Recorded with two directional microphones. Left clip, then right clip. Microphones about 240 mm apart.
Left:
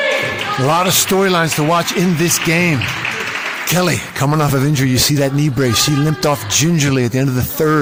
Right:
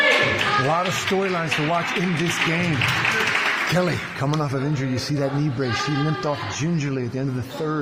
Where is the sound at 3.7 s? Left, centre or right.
Left.